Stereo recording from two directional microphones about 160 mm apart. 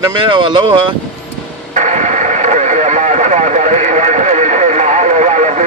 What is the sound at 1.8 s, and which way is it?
Radio, 50° right (ahead or behind).